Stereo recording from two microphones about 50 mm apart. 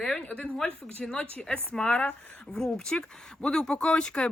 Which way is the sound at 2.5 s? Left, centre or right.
Centre.